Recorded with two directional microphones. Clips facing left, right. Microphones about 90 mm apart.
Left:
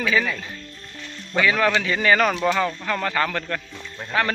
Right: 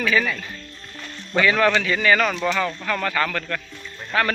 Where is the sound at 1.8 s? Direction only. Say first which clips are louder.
Even; 25° left (ahead or behind).